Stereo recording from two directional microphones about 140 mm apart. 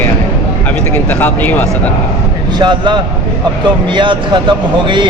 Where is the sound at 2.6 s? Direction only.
35° right (ahead or behind).